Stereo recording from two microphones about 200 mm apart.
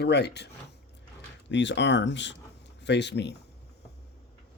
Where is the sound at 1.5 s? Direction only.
60° left (ahead or behind).